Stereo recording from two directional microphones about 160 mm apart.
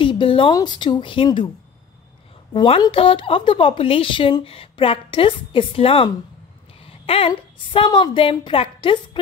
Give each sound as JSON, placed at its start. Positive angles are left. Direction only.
{"t": 0.0, "sound": "a sound", "side_deg": 30}
{"t": 0.6, "sound": "a woman's voice", "side_deg": 30}
{"t": 2.5, "sound": "a woman's voice", "side_deg": 30}